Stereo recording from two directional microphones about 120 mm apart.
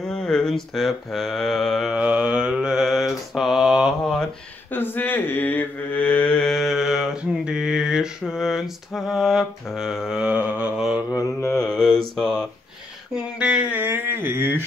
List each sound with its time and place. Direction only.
0.0 s mantra: 5° left (ahead or behind)
4.6 s mantra: 15° left (ahead or behind); by 11.1 s 5° right (ahead or behind)
11.1 s mantra: 25° left (ahead or behind)
11.7 s mantra: 5° left (ahead or behind)
13.1 s a sound: 10° right (ahead or behind)